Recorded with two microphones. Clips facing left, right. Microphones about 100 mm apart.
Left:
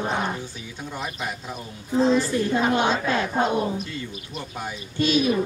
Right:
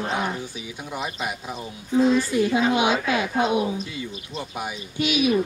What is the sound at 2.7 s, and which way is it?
A man's voice, 10° right (ahead or behind).